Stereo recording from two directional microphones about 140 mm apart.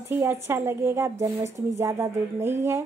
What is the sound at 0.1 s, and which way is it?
Speech, 15° right (ahead or behind).